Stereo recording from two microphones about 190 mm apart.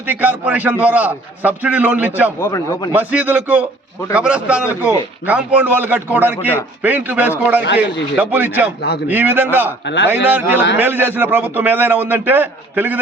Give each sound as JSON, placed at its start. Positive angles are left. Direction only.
{"t": 0.0, "sound": "a man's voice", "side_deg": -10}
{"t": 2.4, "sound": "a man's voice", "side_deg": 20}
{"t": 2.9, "sound": "a man's voice", "side_deg": -5}
{"t": 9.8, "sound": "a man's voice", "side_deg": 70}
{"t": 10.2, "sound": "a man's voice", "side_deg": -10}